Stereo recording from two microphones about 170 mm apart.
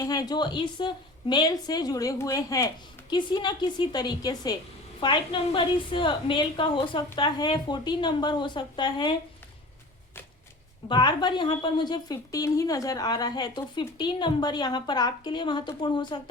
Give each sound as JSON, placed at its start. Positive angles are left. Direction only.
{"t": 0.0, "sound": "a woman's voice", "side_deg": 20}
{"t": 10.8, "sound": "a woman's voice", "side_deg": 25}